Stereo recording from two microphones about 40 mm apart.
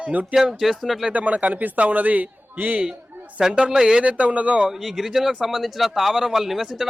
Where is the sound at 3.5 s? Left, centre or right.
Right.